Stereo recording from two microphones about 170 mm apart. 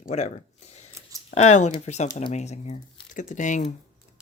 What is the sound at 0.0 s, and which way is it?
Speech, 40° left (ahead or behind).